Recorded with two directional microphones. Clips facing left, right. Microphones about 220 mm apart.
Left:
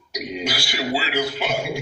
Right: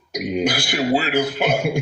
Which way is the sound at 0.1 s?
50° right (ahead or behind).